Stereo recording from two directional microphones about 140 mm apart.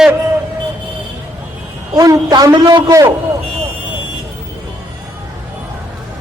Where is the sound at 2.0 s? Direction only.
25° right (ahead or behind).